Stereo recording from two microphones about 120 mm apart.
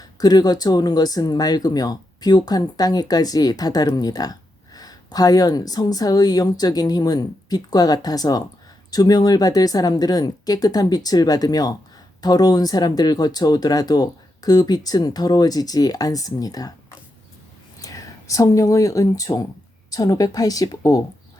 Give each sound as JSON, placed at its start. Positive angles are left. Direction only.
{"t": 0.0, "sound": "speech", "side_deg": 35}
{"t": 17.7, "sound": "speech", "side_deg": 30}